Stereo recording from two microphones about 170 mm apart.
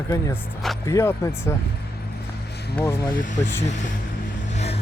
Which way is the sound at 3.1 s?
50° left (ahead or behind).